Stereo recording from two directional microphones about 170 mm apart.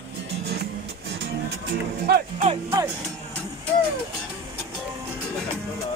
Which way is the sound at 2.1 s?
75° right (ahead or behind).